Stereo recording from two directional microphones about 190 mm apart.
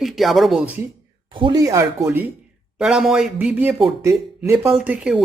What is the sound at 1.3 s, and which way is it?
Speech, 25° right (ahead or behind).